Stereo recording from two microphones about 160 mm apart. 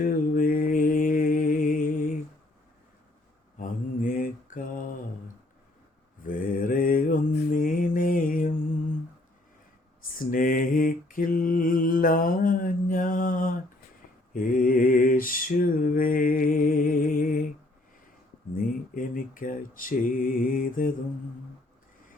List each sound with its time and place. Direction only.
0.0 s mantra: 60° left (ahead or behind)
3.6 s mantra: 55° left (ahead or behind)
6.2 s mantra: 60° left (ahead or behind)
10.2 s mantra: 60° left (ahead or behind)
18.5 s mantra: 60° left (ahead or behind)